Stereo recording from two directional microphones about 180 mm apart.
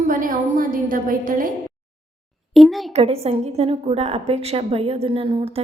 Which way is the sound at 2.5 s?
Centre (ahead or behind).